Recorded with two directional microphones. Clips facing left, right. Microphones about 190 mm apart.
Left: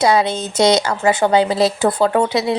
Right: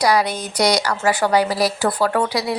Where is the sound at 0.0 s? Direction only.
25° left (ahead or behind).